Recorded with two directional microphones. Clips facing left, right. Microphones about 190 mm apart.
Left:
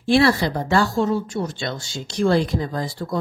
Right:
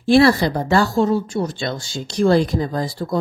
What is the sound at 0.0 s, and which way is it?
Speech, 40° right (ahead or behind).